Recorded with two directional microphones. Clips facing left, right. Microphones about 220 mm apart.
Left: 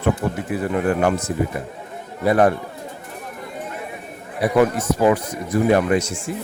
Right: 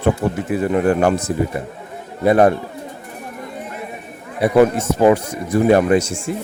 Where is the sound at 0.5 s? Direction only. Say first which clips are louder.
Right 4 dB; 30° right (ahead or behind).